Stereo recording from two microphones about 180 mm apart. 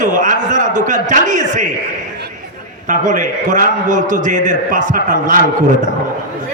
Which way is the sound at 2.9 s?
45° right (ahead or behind).